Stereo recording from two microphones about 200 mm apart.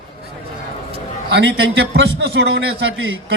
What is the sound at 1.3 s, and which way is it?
A man's voice, 60° right (ahead or behind).